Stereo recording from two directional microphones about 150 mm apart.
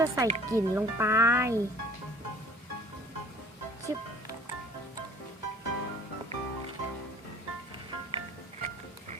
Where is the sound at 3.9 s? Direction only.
20° right (ahead or behind).